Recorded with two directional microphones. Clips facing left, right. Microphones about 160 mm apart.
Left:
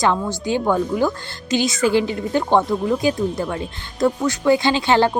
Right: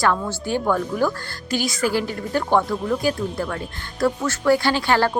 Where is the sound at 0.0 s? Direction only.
15° left (ahead or behind).